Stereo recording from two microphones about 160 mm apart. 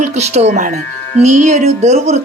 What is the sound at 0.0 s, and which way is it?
Speech, 45° right (ahead or behind).